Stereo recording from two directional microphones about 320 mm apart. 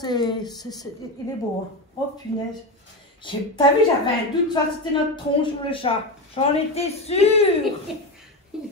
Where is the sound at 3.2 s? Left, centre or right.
Centre.